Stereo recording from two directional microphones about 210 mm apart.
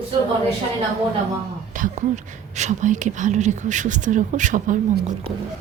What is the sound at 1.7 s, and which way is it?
Speech, 35° right (ahead or behind).